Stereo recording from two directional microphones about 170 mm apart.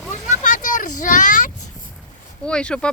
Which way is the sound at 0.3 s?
50° left (ahead or behind).